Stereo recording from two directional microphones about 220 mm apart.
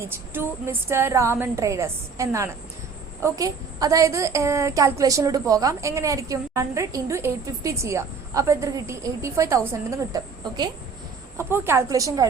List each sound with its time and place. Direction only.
0.1 s a woman's voice: 10° right (ahead or behind)